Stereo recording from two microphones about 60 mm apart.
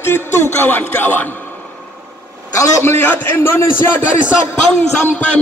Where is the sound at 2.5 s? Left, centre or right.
Left.